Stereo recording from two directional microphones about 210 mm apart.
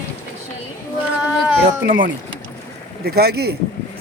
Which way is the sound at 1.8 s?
40° right (ahead or behind).